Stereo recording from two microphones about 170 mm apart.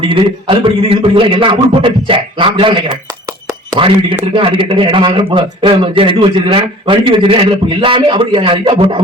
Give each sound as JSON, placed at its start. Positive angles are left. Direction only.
{"t": 0.1, "sound": "a man's voice", "side_deg": -30}